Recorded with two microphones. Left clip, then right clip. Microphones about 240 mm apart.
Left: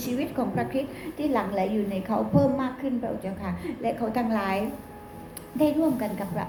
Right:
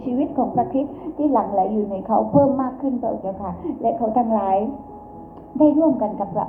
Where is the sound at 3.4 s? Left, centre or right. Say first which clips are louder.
Right 7 dB; centre.